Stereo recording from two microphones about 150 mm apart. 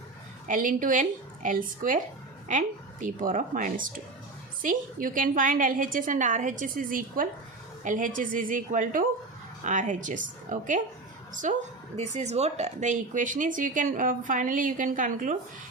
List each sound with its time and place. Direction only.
0.4 s speech: 65° right (ahead or behind)